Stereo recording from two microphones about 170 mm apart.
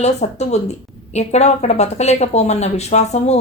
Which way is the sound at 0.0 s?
40° left (ahead or behind).